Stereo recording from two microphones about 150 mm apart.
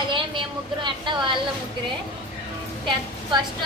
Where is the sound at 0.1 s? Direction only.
35° right (ahead or behind).